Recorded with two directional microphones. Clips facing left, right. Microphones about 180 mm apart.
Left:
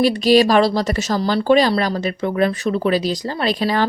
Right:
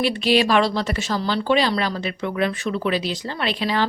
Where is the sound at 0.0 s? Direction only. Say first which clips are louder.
Left 6 dB; 40° left (ahead or behind).